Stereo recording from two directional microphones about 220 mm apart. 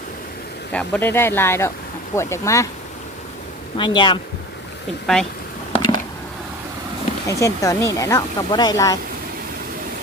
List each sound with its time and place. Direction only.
0.7 s speech: 5° left (ahead or behind)
3.8 s speech: 20° left (ahead or behind)
5.1 s speech: centre (ahead or behind)
7.3 s speech: 15° left (ahead or behind)